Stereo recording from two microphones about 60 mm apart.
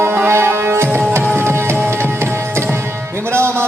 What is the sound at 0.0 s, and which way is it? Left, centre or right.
Music, right.